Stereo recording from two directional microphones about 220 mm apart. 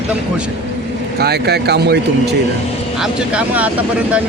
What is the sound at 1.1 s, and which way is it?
Speech, 45° right (ahead or behind).